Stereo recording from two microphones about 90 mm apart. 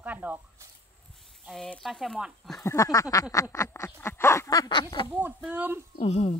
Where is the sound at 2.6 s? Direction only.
35° left (ahead or behind).